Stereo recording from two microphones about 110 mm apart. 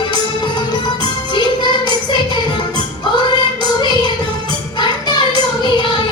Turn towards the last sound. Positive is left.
turn(degrees=40)  # may be behind; listen again after turning